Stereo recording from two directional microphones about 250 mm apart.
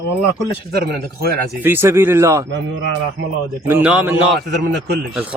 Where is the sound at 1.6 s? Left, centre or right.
Centre.